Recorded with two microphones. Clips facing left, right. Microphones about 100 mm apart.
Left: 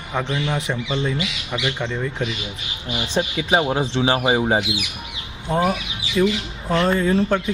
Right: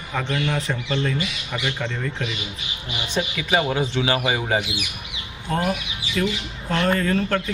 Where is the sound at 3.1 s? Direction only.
30° left (ahead or behind).